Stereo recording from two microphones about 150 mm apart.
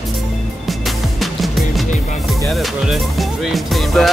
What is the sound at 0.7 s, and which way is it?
Music, centre (ahead or behind).